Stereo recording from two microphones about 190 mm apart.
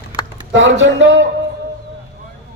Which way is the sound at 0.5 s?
75° right (ahead or behind).